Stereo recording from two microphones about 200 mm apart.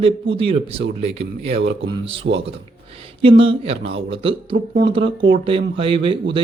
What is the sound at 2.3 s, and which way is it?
Speech, 50° right (ahead or behind).